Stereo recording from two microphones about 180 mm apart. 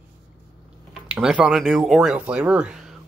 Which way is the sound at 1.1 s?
5° right (ahead or behind).